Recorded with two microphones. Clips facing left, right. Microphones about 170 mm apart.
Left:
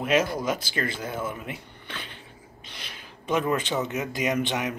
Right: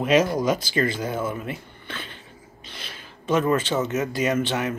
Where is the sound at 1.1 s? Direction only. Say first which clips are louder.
Right 4 dB; 15° left (ahead or behind).